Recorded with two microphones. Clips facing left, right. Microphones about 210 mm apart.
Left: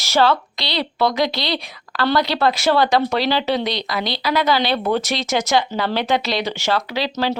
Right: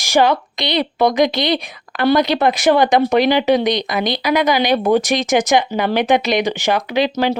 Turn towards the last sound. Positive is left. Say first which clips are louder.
# right 5 dB
turn(degrees=-15)  # may be behind; listen again after turning